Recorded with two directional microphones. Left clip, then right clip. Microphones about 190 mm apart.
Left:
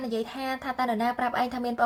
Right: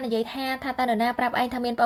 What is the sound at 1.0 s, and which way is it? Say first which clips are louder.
Speech: right 2 dB; 60° right (ahead or behind).